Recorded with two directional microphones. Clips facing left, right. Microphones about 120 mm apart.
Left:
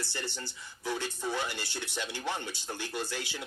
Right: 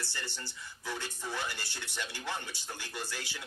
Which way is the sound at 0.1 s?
15° left (ahead or behind).